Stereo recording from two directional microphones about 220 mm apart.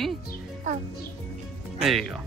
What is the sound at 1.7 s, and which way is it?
Speech, centre (ahead or behind).